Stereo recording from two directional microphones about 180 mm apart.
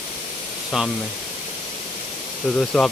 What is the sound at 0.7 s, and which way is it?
Speech, centre (ahead or behind).